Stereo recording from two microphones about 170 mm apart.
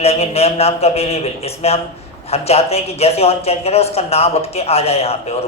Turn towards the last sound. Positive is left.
turn(degrees=35)  # may be behind; listen again after turning